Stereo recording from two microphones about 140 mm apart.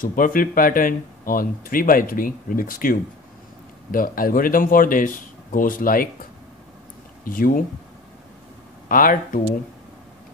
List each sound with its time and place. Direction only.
0.0 s speech: 75° left (ahead or behind)
7.2 s speech: 85° left
8.8 s speech: 90° left